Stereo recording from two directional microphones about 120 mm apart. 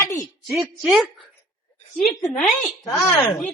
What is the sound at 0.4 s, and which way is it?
Speech, centre (ahead or behind).